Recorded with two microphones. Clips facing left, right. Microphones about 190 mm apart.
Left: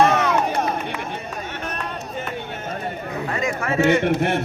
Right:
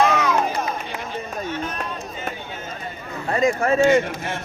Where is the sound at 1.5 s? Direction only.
65° left (ahead or behind).